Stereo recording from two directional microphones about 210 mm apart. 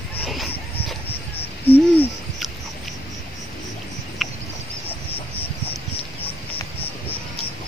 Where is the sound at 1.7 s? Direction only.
30° left (ahead or behind).